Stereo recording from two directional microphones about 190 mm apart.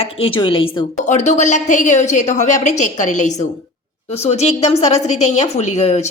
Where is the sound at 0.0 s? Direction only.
30° left (ahead or behind).